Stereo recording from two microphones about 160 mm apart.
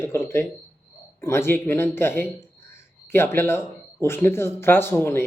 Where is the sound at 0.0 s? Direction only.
15° left (ahead or behind).